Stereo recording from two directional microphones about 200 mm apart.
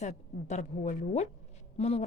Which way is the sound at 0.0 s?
35° left (ahead or behind).